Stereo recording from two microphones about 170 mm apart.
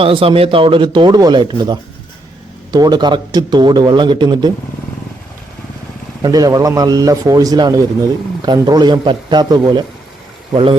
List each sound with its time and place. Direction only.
0.0 s speech: 30° right (ahead or behind)
6.2 s speech: 20° right (ahead or behind)